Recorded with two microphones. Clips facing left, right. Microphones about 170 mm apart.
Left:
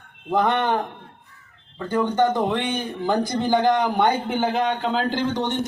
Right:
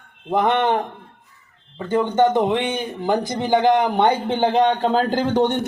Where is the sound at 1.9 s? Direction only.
20° right (ahead or behind).